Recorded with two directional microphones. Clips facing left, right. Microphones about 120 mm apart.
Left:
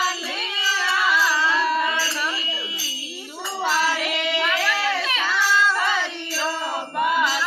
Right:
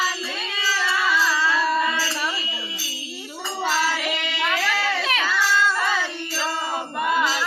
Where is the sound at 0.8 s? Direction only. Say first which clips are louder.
Left 1 dB; centre (ahead or behind).